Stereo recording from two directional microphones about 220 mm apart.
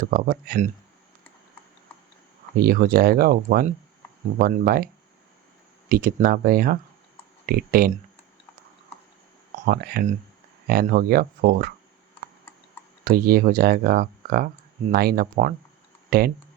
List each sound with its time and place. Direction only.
0.0 s speech: 40° right (ahead or behind)
2.6 s speech: 40° right (ahead or behind)
5.9 s speech: 40° right (ahead or behind)
9.5 s speech: 35° right (ahead or behind)
13.1 s speech: 45° right (ahead or behind)